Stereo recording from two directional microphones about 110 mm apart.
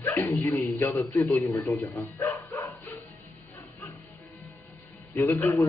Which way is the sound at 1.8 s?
20° left (ahead or behind).